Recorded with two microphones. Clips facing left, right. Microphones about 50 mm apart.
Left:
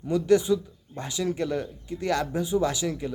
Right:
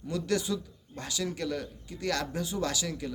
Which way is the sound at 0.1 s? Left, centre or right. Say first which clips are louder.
Left 9 dB; left.